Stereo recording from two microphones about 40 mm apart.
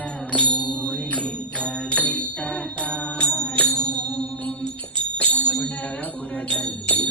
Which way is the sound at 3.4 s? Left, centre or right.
Left.